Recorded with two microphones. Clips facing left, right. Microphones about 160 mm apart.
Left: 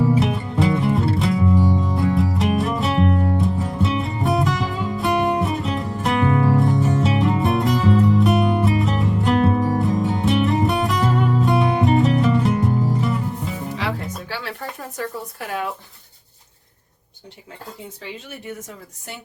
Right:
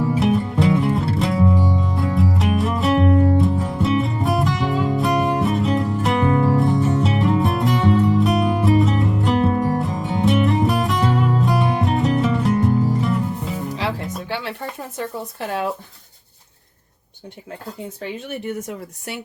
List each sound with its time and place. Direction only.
0.2 s music: centre (ahead or behind)
14.3 s a sound: 25° right (ahead or behind)
18.0 s speech: 65° right (ahead or behind)